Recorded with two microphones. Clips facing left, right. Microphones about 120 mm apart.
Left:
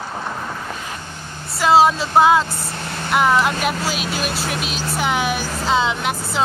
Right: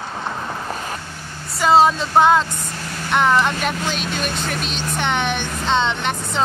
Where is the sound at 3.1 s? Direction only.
5° left (ahead or behind).